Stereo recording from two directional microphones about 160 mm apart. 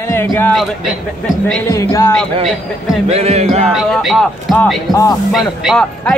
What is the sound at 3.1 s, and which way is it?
Music, 40° right (ahead or behind).